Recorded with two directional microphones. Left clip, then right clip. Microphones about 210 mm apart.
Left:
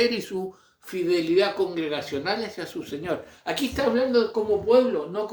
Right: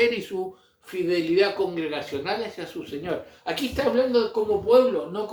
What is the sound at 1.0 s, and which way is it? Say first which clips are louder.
Speech: even; 50° left (ahead or behind).